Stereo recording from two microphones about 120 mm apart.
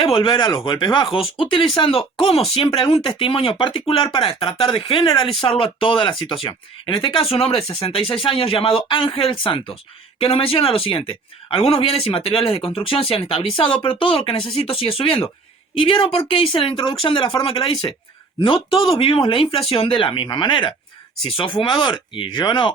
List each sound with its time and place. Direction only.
0.0 s speech: 50° left (ahead or behind)